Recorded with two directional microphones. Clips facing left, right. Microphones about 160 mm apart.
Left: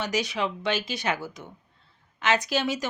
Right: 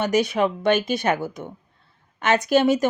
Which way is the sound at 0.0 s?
55° right (ahead or behind).